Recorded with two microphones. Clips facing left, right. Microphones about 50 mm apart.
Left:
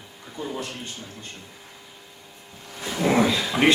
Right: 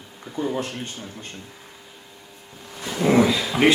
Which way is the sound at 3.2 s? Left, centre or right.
Centre.